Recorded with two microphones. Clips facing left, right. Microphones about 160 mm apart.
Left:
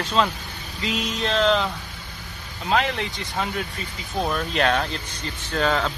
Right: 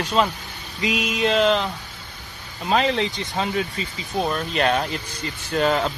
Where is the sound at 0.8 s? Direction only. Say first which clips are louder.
Right 4 dB; 10° right (ahead or behind).